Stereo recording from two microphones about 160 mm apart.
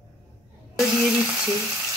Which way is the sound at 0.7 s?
5° right (ahead or behind).